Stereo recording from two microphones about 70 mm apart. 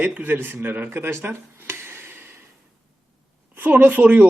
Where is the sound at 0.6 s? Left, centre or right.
Right.